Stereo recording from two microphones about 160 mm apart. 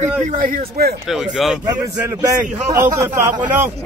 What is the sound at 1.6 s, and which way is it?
A man's voice, 25° right (ahead or behind).